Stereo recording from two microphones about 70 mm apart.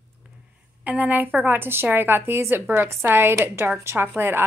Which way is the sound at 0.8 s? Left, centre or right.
Right.